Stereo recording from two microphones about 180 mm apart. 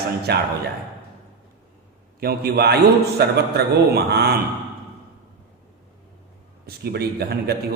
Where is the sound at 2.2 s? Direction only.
60° right (ahead or behind).